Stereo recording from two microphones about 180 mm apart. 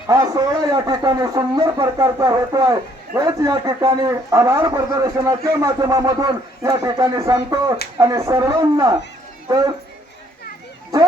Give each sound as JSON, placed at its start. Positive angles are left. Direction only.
{"t": 0.1, "sound": "speech", "side_deg": -20}